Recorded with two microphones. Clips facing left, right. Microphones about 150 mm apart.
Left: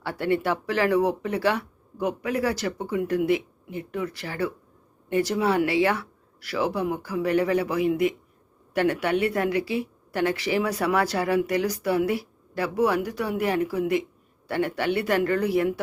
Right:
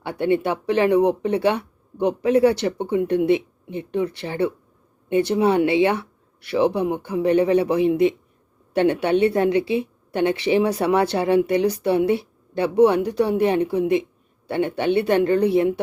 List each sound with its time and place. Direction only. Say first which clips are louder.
0.0 s speech: right 4 dB; 20° right (ahead or behind)